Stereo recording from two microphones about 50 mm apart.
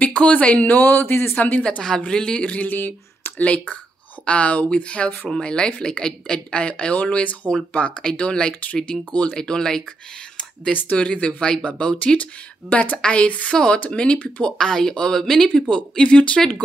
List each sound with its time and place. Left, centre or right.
0.0 s speech: left
1.3 s speech: left
2.0 s speech: centre
2.4 s speech: left
2.7 s speech: left
3.4 s speech: left
9.4 s speech: centre
10.7 s speech: left
14.4 s speech: centre